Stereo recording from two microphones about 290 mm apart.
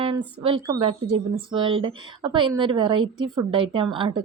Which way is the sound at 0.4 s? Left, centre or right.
Centre.